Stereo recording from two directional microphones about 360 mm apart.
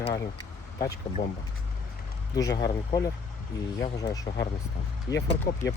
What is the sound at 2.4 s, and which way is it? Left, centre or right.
Speech, centre.